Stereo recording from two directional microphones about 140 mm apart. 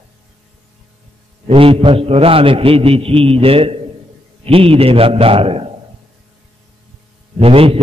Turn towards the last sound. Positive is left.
turn(degrees=-40)  # may be behind; listen again after turning